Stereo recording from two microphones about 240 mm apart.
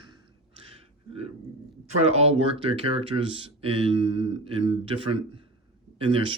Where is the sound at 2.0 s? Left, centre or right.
Right.